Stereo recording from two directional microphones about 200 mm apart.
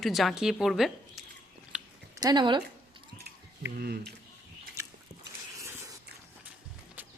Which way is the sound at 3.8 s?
50° right (ahead or behind).